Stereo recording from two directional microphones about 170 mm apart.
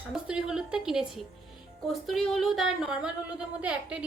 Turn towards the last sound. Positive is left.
turn(degrees=-5)  # may be behind; listen again after turning